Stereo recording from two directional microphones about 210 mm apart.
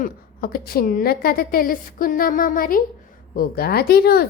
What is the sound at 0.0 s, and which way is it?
A woman's voice, 45° left (ahead or behind).